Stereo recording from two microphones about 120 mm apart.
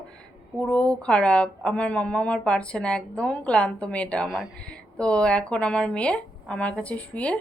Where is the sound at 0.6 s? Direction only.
10° left (ahead or behind).